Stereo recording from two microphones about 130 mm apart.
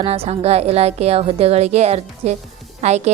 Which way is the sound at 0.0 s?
50° right (ahead or behind).